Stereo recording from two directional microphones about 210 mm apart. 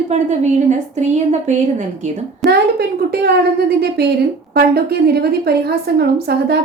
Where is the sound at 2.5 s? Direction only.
50° right (ahead or behind).